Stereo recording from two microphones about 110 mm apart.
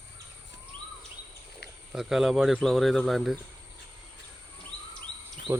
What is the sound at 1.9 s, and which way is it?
Speech, 5° right (ahead or behind).